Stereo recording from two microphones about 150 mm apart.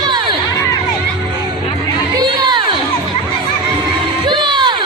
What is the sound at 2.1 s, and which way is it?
Crowd, 30° right (ahead or behind).